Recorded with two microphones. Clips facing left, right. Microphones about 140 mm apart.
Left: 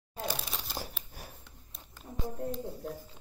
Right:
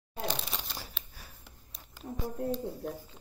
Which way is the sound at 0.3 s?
5° left (ahead or behind).